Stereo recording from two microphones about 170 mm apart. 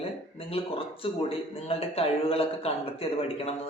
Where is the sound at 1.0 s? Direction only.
35° left (ahead or behind).